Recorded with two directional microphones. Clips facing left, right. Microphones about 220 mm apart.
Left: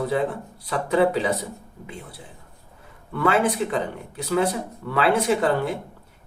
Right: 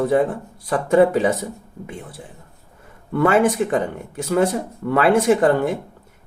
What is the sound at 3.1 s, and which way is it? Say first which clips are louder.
Speech: right 5 dB; 45° right (ahead or behind).